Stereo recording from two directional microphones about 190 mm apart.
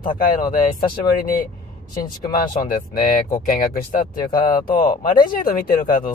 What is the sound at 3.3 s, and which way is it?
Speech, 50° left (ahead or behind).